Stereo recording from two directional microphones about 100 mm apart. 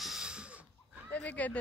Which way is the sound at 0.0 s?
5° right (ahead or behind).